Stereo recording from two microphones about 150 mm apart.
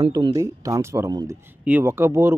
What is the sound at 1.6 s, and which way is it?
Speech, 15° right (ahead or behind).